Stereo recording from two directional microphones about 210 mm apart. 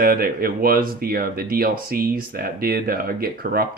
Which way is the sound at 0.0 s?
45° right (ahead or behind).